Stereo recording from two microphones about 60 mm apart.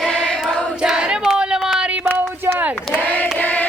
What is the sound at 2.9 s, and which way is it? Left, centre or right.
Hands, left.